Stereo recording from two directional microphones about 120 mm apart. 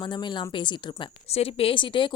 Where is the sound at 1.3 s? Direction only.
55° left (ahead or behind).